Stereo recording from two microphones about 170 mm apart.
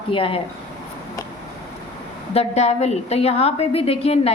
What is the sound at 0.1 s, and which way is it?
Speech, 30° left (ahead or behind).